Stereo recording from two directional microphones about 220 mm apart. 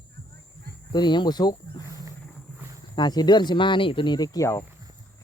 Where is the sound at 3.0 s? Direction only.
20° left (ahead or behind).